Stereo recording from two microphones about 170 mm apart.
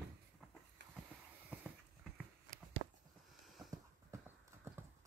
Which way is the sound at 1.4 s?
5° right (ahead or behind).